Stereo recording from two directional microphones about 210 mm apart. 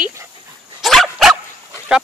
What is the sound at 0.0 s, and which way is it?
Dog, 15° right (ahead or behind).